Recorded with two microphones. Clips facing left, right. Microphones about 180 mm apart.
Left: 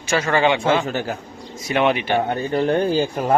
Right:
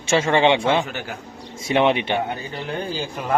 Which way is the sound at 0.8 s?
40° left (ahead or behind).